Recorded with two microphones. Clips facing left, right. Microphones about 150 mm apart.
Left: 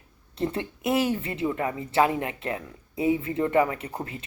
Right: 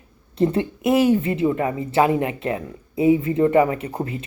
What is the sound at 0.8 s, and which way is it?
Speech, 15° right (ahead or behind).